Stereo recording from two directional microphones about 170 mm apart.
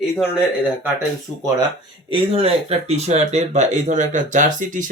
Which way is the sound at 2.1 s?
35° right (ahead or behind).